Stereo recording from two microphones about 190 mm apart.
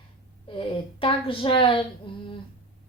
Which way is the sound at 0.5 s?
25° left (ahead or behind).